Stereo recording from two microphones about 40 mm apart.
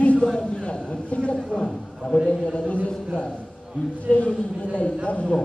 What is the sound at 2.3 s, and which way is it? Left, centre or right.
Speech, left.